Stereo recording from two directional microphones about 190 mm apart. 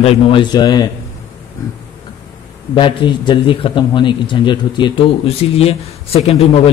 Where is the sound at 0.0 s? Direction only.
30° left (ahead or behind).